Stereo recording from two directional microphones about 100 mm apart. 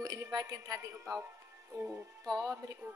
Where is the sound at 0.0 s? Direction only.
40° right (ahead or behind).